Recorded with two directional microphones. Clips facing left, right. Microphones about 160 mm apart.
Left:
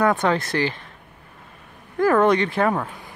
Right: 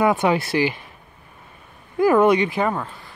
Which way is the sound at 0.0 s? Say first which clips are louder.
Right 1 dB; 10° right (ahead or behind).